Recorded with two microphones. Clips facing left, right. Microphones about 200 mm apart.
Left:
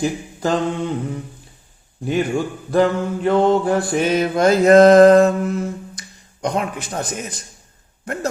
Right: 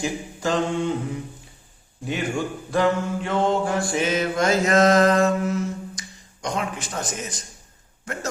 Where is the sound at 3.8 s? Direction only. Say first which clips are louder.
Left 5 dB; 60° left (ahead or behind).